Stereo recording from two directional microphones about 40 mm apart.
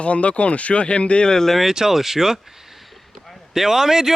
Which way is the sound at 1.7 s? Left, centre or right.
Centre.